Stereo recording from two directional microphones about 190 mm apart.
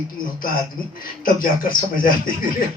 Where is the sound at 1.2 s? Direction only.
50° left (ahead or behind).